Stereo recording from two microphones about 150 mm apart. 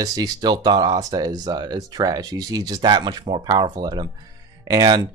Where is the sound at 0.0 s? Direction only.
25° right (ahead or behind).